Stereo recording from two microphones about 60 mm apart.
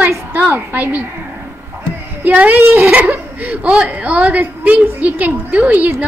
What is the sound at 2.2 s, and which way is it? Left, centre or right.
A woman's voice, right.